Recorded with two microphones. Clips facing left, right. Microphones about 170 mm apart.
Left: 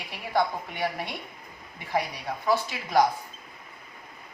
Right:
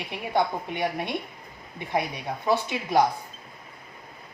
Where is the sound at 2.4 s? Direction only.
20° right (ahead or behind).